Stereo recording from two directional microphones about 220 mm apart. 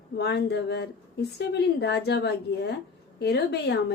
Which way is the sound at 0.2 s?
50° left (ahead or behind).